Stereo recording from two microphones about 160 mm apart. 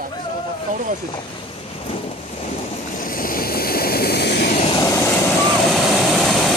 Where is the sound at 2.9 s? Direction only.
60° left (ahead or behind); by 4.5 s 90° left.